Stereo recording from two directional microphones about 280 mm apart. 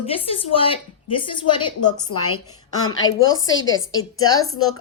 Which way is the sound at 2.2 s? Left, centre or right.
Left.